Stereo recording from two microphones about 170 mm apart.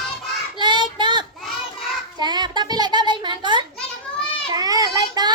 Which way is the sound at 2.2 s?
25° right (ahead or behind).